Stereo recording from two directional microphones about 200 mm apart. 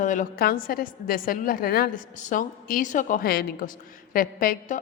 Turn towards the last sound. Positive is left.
turn(degrees=40)  # may be behind; listen again after turning